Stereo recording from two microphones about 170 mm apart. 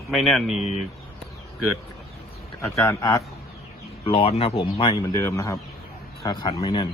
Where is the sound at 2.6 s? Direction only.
15° left (ahead or behind).